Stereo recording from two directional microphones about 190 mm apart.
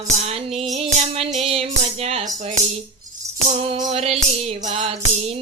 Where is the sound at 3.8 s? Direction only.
30° right (ahead or behind).